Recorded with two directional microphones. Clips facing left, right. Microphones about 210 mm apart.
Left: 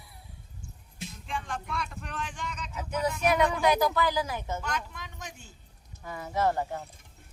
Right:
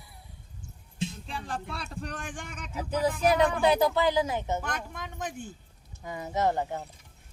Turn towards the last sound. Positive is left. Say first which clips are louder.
# even
turn(degrees=-20)  # may be behind; listen again after turning